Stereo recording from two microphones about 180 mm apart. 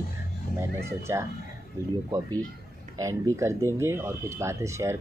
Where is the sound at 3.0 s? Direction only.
15° right (ahead or behind).